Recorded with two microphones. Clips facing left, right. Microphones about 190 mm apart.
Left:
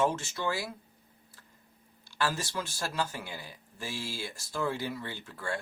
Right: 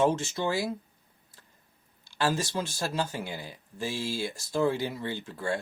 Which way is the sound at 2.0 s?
20° right (ahead or behind).